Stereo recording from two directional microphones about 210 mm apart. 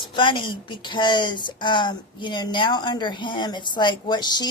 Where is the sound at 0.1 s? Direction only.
25° left (ahead or behind).